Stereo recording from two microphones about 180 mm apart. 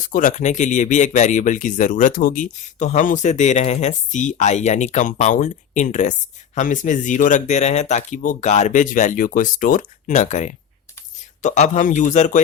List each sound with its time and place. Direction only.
0.0 s speech: 45° left (ahead or behind)